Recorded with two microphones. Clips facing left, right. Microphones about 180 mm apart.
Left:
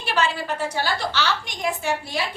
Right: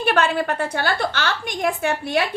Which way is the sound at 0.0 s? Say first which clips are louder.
Right 5 dB; 55° right (ahead or behind).